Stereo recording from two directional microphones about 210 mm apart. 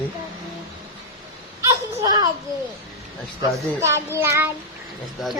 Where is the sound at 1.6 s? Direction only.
15° right (ahead or behind).